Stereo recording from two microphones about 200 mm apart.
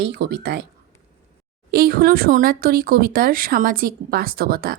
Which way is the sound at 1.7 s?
50° right (ahead or behind).